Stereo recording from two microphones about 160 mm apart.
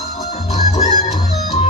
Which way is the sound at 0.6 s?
45° left (ahead or behind).